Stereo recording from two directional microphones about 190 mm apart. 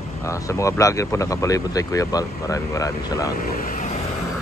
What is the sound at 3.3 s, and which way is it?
Speech, 45° left (ahead or behind).